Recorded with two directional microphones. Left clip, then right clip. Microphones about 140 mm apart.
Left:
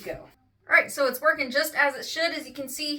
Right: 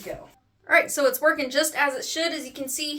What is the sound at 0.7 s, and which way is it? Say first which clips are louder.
Speech: right 2 dB; 90° right.